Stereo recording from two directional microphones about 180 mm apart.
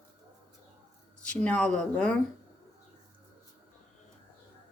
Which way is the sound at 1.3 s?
5° left (ahead or behind).